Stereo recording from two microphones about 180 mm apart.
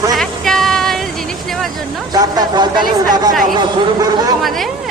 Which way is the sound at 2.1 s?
20° right (ahead or behind).